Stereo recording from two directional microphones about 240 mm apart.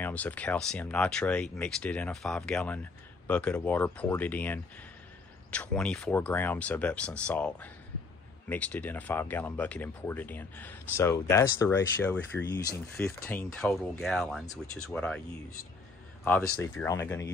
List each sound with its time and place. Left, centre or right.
0.0 s speech: centre
16.3 s speech: centre